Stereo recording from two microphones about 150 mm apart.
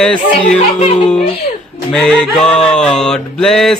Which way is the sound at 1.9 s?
5° left (ahead or behind).